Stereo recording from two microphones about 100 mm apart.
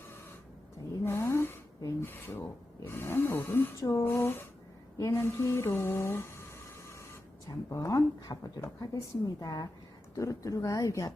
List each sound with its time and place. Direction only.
1.0 s a sound: 25° left (ahead or behind)
2.8 s speech: 25° left (ahead or behind)
7.4 s speech: 35° left (ahead or behind)